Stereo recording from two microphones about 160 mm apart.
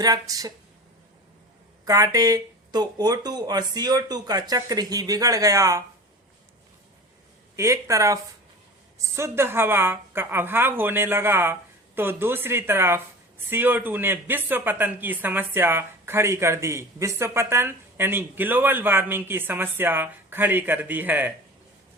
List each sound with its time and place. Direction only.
0.0 s speech: 20° right (ahead or behind)
1.8 s speech: 25° right (ahead or behind)
7.5 s speech: 20° right (ahead or behind)